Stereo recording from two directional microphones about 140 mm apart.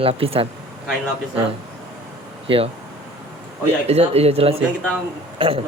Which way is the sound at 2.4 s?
40° right (ahead or behind).